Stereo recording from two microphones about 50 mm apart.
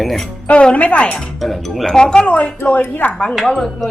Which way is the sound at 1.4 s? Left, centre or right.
Centre.